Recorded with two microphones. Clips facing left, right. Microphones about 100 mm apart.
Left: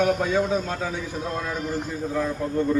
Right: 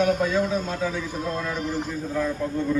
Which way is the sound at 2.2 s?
10° left (ahead or behind).